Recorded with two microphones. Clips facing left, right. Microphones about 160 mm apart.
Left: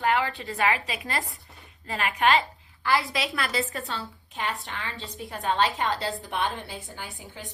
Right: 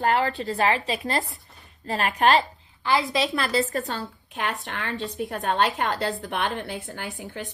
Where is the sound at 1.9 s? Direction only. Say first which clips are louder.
Right 3 dB; 40° right (ahead or behind).